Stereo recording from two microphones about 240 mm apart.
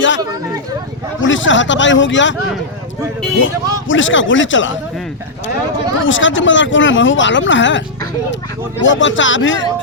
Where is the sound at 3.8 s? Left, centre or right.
Left.